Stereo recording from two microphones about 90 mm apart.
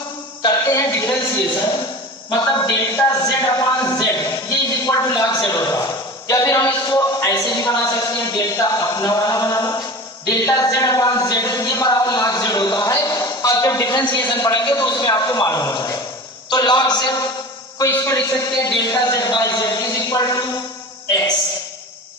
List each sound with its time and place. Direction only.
0.4 s a sound: 35° left (ahead or behind)
2.3 s a man's voice: 40° left (ahead or behind)
14.2 s a man's voice: 40° left (ahead or behind)
16.5 s a man's voice: 50° left (ahead or behind)
17.7 s a man's voice: 35° left (ahead or behind)